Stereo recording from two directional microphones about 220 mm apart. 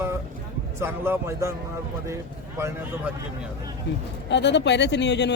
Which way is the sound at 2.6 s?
10° right (ahead or behind).